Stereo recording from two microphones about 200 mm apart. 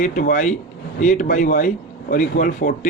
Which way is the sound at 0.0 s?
40° left (ahead or behind).